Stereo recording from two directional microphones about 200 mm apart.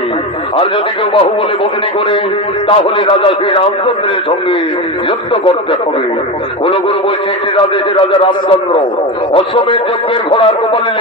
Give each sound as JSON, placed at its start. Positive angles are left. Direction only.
{"t": 2.8, "sound": "a man's voice", "side_deg": 25}
{"t": 5.3, "sound": "a man's voice", "side_deg": 25}
{"t": 7.5, "sound": "a man's voice", "side_deg": 25}